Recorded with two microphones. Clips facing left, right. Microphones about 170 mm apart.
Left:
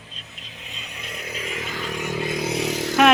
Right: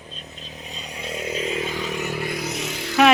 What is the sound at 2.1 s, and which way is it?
Vehicle, 20° left (ahead or behind).